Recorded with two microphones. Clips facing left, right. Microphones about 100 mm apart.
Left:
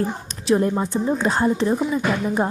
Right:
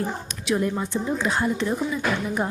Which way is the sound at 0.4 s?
35° left (ahead or behind).